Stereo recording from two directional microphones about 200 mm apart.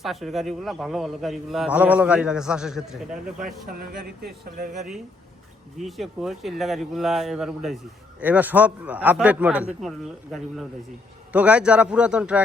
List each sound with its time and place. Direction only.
0.0 s a man's voice: centre (ahead or behind)
4.2 s speech: 45° right (ahead or behind)
5.8 s a man's voice: centre (ahead or behind)
11.3 s a man's voice: 5° right (ahead or behind)